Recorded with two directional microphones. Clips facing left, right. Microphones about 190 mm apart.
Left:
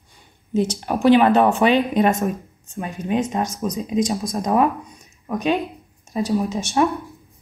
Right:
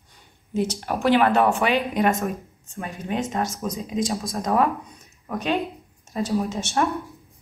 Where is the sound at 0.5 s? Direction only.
15° left (ahead or behind).